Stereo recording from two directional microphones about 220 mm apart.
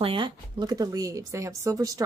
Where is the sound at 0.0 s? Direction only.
20° right (ahead or behind).